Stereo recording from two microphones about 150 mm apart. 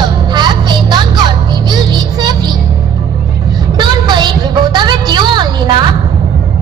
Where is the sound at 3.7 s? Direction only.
30° right (ahead or behind).